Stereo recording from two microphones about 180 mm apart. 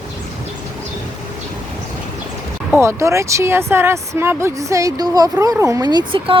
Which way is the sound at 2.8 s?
15° right (ahead or behind).